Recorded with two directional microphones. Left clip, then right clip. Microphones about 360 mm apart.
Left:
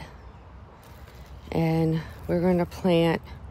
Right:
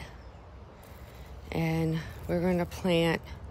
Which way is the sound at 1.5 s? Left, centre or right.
Centre.